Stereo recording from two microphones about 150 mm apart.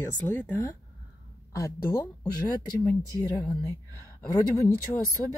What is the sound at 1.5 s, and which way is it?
Speech, 20° left (ahead or behind).